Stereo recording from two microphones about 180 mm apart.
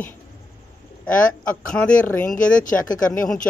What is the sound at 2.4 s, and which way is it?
Speech, 45° left (ahead or behind).